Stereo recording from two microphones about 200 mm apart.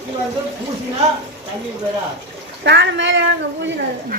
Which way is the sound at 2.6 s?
60° right (ahead or behind).